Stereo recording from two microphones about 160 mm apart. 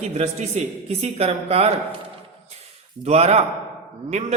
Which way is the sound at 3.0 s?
40° right (ahead or behind).